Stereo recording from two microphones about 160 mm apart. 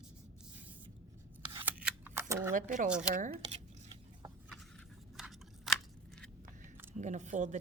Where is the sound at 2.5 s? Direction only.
55° right (ahead or behind).